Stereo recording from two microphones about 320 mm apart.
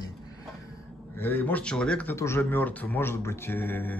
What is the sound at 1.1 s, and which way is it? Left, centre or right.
Speech, centre.